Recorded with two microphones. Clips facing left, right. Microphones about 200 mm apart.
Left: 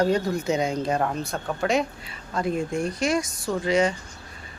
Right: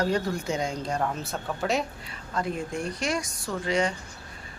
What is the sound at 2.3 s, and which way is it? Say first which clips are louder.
Speech: left 4 dB; 25° left (ahead or behind).